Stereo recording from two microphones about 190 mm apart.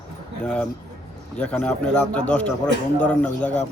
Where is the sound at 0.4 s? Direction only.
5° left (ahead or behind).